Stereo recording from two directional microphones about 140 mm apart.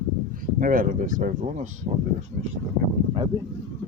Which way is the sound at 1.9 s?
45° right (ahead or behind).